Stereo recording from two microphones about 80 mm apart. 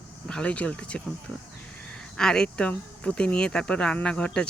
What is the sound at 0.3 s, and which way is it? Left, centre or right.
Speech, centre.